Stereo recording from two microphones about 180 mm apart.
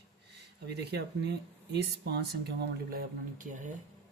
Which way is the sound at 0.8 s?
65° right (ahead or behind).